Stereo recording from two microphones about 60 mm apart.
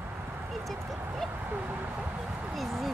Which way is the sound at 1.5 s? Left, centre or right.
Right.